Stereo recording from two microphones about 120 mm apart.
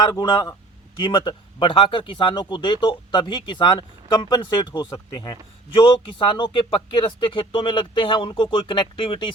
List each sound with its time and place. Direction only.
0.0 s speech: 35° left (ahead or behind)